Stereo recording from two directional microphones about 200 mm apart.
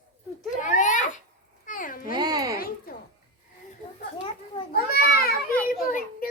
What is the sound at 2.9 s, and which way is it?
Speech, 50° left (ahead or behind).